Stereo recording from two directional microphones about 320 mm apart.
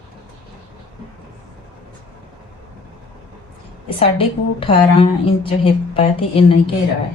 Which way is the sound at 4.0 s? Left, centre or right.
Centre.